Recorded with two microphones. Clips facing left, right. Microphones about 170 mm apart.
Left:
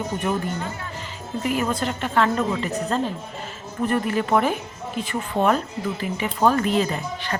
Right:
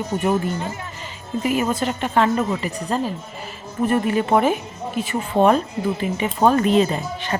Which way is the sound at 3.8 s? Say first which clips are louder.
Right 3 dB; 20° right (ahead or behind).